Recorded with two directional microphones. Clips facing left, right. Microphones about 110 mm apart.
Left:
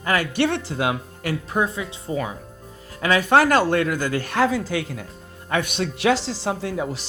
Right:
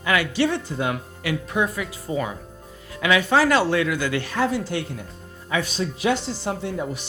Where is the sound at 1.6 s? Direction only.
25° left (ahead or behind).